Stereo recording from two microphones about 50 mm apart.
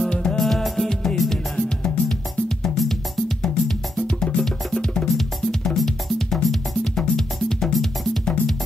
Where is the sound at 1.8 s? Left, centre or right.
Centre.